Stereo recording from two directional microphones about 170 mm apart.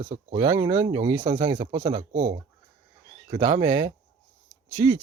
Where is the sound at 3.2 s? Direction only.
40° right (ahead or behind).